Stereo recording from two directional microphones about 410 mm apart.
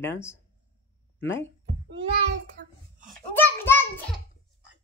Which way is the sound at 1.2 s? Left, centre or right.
Left.